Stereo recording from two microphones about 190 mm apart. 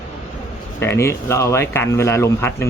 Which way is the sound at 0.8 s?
15° left (ahead or behind).